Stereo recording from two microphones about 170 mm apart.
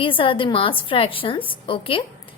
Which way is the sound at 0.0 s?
30° left (ahead or behind).